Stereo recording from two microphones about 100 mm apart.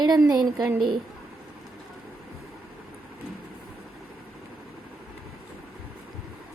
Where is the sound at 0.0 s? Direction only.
40° right (ahead or behind).